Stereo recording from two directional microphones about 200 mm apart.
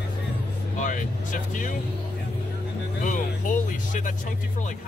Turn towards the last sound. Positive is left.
turn(degrees=40)  # may be behind; listen again after turning